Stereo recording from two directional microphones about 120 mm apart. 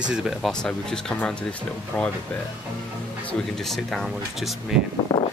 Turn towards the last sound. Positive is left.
turn(degrees=30)  # may be behind; listen again after turning